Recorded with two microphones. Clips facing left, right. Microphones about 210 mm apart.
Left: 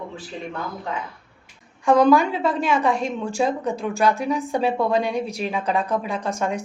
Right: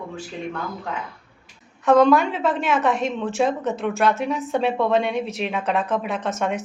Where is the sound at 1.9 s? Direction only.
Centre (ahead or behind).